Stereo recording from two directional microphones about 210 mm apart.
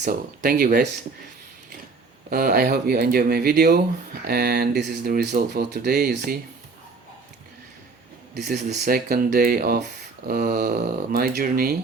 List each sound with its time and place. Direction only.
0.0 s speech: 40° right (ahead or behind)
2.3 s speech: 45° right (ahead or behind)
8.4 s speech: 55° right (ahead or behind)
8.7 s speech: 40° right (ahead or behind)